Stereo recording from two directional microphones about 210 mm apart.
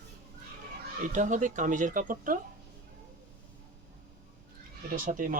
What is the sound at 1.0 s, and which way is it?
Speech, 35° right (ahead or behind).